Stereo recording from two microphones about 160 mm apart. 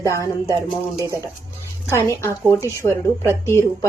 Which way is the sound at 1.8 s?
15° left (ahead or behind).